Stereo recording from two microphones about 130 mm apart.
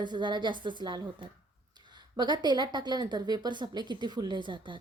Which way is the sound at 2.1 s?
35° right (ahead or behind).